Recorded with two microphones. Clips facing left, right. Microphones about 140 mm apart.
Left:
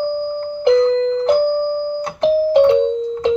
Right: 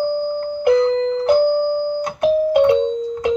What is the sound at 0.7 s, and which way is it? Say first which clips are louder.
Music: left 2 dB; 20° right (ahead or behind).